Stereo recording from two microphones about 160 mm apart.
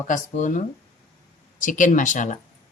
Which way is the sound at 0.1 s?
50° left (ahead or behind).